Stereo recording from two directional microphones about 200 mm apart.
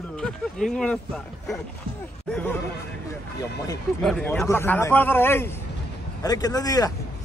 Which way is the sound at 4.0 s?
5° left (ahead or behind).